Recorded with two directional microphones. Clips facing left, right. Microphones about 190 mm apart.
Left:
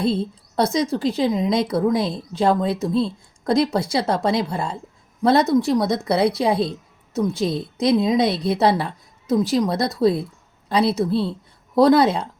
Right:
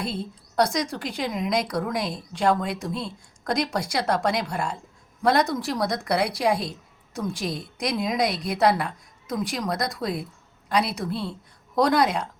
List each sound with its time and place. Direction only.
0.0 s a woman's voice: 25° left (ahead or behind)